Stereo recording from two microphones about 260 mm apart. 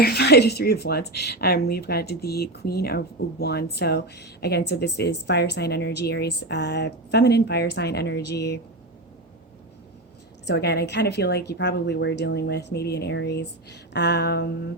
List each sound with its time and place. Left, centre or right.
0.0 s speech: left
10.4 s speech: left